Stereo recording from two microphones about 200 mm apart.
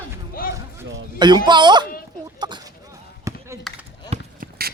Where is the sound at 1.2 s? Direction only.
20° right (ahead or behind).